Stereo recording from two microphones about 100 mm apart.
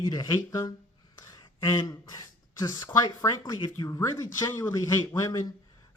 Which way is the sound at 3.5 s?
55° left (ahead or behind).